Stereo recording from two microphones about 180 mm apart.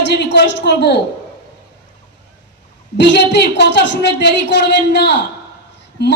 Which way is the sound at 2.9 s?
70° left (ahead or behind).